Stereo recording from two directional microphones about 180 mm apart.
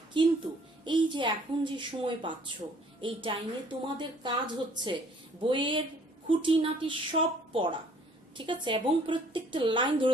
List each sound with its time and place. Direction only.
0.1 s a woman's voice: 25° right (ahead or behind)